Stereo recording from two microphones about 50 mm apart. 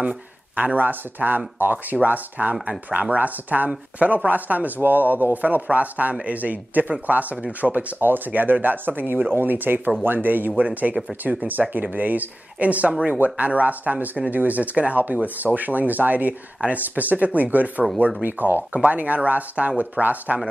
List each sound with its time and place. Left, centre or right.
0.0 s speech: right
8.0 s speech: right